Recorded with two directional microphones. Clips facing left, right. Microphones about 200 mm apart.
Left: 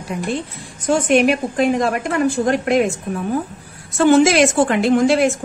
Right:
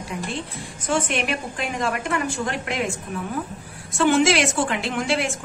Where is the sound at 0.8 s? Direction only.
40° left (ahead or behind).